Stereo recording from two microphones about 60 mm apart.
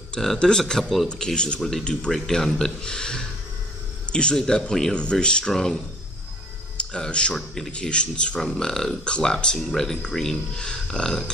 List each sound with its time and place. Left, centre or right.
0.1 s speech: centre
6.8 s speech: centre
7.3 s a man's voice: centre
7.7 s speech: centre